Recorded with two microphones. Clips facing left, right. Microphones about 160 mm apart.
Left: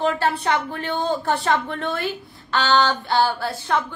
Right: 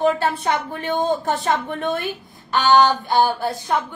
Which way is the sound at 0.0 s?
20° right (ahead or behind).